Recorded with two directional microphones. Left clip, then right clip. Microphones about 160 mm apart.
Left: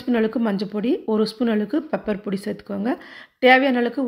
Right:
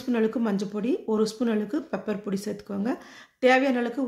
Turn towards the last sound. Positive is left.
turn(degrees=20)  # may be behind; listen again after turning